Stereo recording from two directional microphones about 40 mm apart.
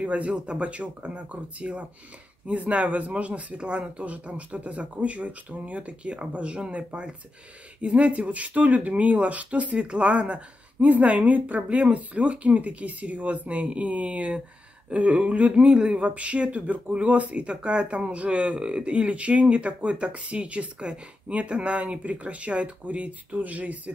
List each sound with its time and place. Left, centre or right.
0.0 s speech: right